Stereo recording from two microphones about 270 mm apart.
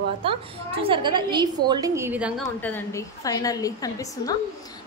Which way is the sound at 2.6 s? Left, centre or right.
Centre.